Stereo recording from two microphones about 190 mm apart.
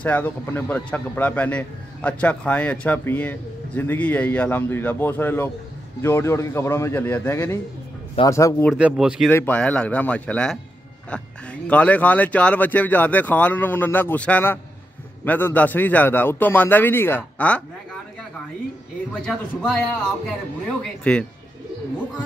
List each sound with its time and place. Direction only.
0.0 s a man's voice: 10° left (ahead or behind)
8.6 s speech: 5° right (ahead or behind)
9.3 s a man's voice: 10° left (ahead or behind)
19.2 s speech: 5° left (ahead or behind)
21.0 s speech: 5° left (ahead or behind)